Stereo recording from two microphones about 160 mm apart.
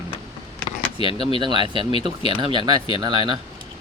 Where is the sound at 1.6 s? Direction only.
35° left (ahead or behind).